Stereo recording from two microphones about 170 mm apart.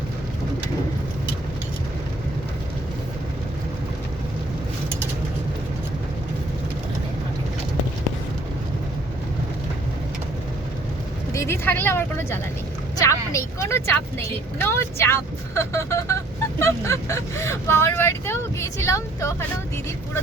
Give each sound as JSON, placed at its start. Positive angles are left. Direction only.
{"t": 11.3, "sound": "a woman's voice", "side_deg": 15}